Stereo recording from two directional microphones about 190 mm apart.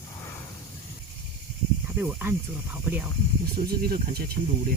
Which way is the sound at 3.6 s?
50° right (ahead or behind).